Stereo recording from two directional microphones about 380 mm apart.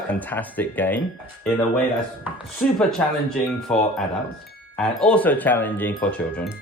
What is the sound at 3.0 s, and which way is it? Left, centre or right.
Speech, centre.